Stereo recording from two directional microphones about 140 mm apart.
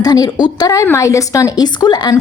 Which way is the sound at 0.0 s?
25° left (ahead or behind).